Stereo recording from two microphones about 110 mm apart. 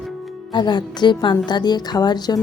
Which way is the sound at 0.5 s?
45° left (ahead or behind).